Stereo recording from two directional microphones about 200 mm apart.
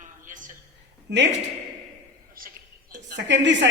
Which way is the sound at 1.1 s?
55° right (ahead or behind).